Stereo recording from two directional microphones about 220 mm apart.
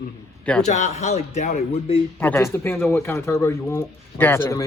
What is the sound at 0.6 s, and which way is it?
Speech, 35° left (ahead or behind).